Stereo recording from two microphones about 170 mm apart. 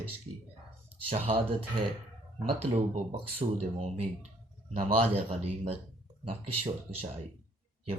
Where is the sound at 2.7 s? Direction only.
40° right (ahead or behind).